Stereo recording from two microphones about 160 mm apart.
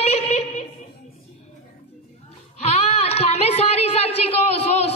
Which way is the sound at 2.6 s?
40° left (ahead or behind).